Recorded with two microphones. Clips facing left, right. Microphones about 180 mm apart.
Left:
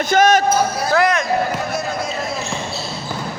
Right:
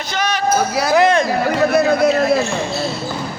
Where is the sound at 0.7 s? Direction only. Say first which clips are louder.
Right 3 dB; 80° right.